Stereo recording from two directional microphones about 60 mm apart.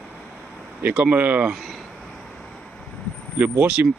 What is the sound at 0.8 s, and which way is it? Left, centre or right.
Speech, right.